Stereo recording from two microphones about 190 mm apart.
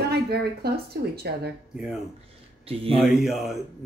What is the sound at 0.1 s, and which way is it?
Speech, 55° right (ahead or behind).